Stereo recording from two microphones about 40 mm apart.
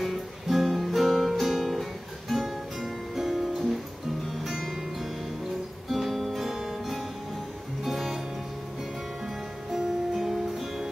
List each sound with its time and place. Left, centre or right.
0.0 s music: centre
5.9 s guitar: centre
7.8 s music: centre
9.2 s music: centre